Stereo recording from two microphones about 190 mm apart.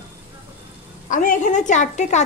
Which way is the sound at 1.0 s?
45° left (ahead or behind).